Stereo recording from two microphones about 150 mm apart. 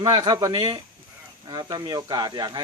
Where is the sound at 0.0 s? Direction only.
25° right (ahead or behind).